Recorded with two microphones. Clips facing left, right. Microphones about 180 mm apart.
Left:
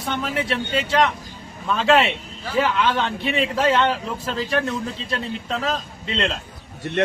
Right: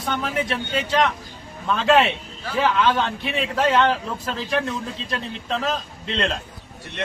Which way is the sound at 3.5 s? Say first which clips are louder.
Right 2 dB; 5° left (ahead or behind).